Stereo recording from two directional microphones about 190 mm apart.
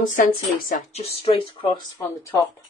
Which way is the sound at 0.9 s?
30° left (ahead or behind).